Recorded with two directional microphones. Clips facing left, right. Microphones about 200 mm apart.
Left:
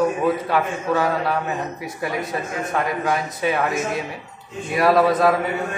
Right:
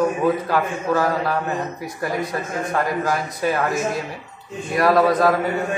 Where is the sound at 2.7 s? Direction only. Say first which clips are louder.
Even; centre (ahead or behind).